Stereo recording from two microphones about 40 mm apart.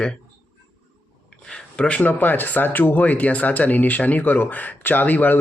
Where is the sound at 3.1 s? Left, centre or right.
Left.